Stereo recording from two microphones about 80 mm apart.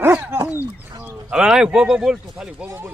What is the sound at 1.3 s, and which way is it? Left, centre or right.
A man's voice, centre.